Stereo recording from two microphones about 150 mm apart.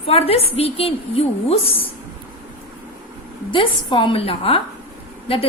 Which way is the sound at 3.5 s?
35° left (ahead or behind).